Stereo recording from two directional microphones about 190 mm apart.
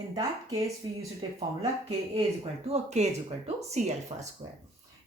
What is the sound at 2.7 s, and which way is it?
Speech, 35° right (ahead or behind).